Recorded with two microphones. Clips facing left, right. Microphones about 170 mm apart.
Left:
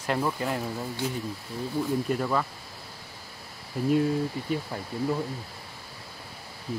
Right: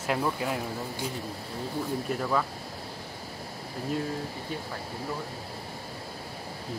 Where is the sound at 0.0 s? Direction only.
5° right (ahead or behind).